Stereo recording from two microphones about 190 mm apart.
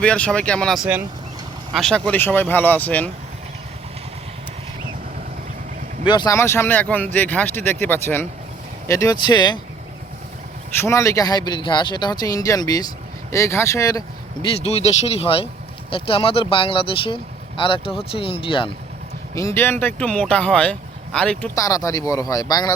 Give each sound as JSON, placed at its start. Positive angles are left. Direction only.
{"t": 0.0, "sound": "speech", "side_deg": 5}
{"t": 6.1, "sound": "speech", "side_deg": 20}
{"t": 10.8, "sound": "speech", "side_deg": 15}
{"t": 14.6, "sound": "speech", "side_deg": 35}
{"t": 19.3, "sound": "speech", "side_deg": 15}
{"t": 21.5, "sound": "speech", "side_deg": 15}